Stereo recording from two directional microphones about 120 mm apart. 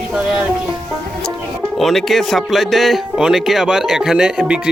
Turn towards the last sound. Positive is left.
turn(degrees=-10)  # may be behind; listen again after turning